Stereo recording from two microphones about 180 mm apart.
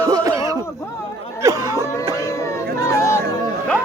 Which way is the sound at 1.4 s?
20° right (ahead or behind).